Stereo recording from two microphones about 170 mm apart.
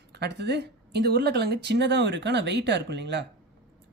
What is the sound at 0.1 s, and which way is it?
A woman's voice, 80° right.